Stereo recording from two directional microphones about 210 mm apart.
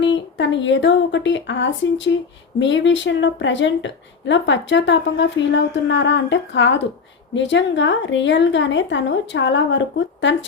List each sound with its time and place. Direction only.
0.0 s a woman's voice: 60° left (ahead or behind)